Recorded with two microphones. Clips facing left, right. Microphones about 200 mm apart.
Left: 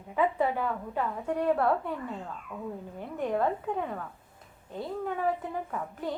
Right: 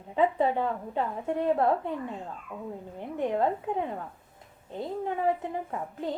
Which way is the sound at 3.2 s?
20° right (ahead or behind).